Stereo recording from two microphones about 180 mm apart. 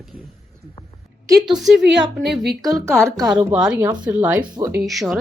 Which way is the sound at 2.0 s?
65° right (ahead or behind).